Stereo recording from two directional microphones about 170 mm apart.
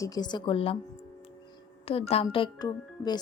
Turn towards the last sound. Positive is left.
turn(degrees=25)  # may be behind; listen again after turning